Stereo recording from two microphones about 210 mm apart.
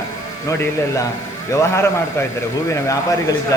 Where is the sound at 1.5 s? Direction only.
10° left (ahead or behind).